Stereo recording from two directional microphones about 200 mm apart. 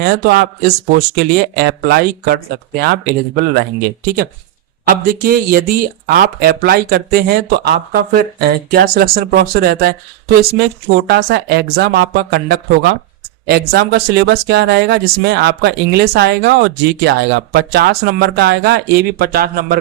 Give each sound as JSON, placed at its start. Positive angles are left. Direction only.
{"t": 0.0, "sound": "speech", "side_deg": -50}